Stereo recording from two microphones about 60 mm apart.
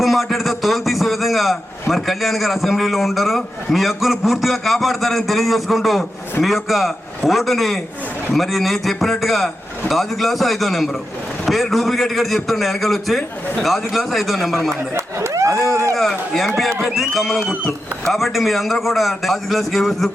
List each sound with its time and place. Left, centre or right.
0.0 s a man's voice: centre
14.8 s speech: right
15.3 s a sound: right
16.0 s a man's voice: centre